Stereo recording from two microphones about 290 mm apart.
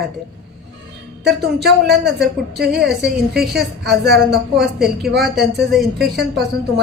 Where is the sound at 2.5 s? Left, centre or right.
Right.